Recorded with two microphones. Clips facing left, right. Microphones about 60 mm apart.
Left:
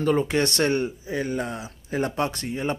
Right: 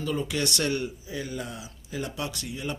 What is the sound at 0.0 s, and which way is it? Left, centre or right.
Speech, left.